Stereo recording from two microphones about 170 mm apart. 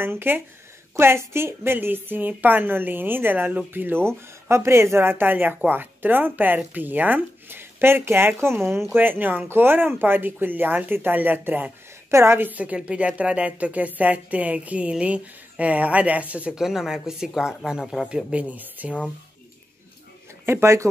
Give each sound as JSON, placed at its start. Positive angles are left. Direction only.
{"t": 0.0, "sound": "speech", "side_deg": -10}
{"t": 20.4, "sound": "speech", "side_deg": -15}